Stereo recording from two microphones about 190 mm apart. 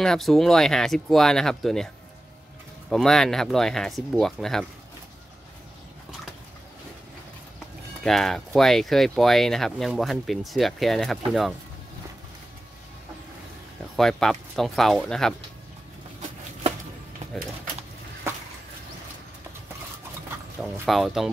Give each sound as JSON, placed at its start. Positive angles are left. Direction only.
{"t": 0.0, "sound": "speech", "side_deg": 0}
{"t": 2.9, "sound": "speech", "side_deg": 0}
{"t": 8.0, "sound": "speech", "side_deg": 0}
{"t": 13.9, "sound": "speech", "side_deg": 0}
{"t": 17.2, "sound": "a sound", "side_deg": -35}
{"t": 20.6, "sound": "speech", "side_deg": 0}